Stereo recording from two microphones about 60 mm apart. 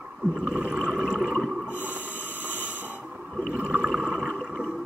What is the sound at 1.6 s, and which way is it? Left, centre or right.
Snort, left.